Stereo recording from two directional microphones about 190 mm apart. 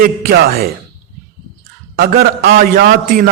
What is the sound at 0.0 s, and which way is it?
Speech, 50° right (ahead or behind).